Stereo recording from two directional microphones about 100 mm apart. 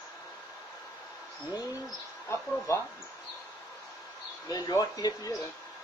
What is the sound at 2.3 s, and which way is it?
Speech, 30° left (ahead or behind).